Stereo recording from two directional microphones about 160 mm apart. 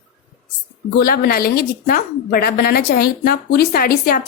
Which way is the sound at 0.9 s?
70° left (ahead or behind).